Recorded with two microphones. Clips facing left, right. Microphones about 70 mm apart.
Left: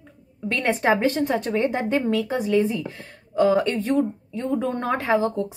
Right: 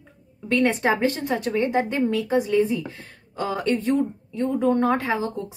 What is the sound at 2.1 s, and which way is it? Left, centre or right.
A woman's voice, left.